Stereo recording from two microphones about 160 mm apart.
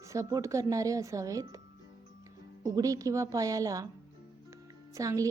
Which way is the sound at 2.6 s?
20° right (ahead or behind).